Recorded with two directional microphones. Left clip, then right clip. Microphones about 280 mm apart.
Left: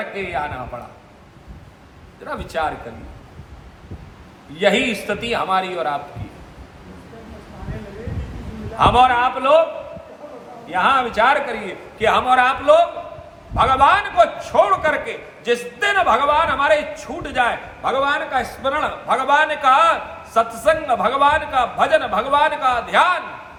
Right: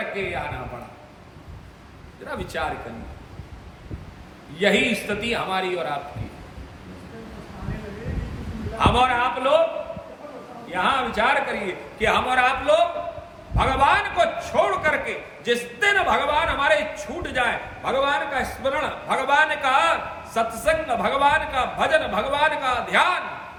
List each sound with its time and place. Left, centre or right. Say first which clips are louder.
2.2 s a man's voice: left 5 dB; centre
4.5 s a man's voice: left 3 dB; centre
8.8 s a man's voice: left 6 dB; centre
10.7 s a man's voice: left 5 dB; centre